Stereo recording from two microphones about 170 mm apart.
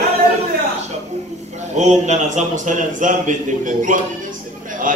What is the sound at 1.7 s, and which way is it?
Speech, 45° right (ahead or behind).